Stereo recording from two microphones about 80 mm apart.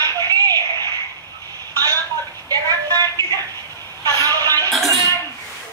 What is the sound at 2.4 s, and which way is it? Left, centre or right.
Music, right.